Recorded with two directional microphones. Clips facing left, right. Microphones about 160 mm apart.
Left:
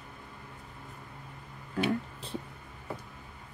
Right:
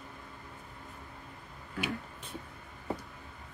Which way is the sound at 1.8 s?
30° left (ahead or behind).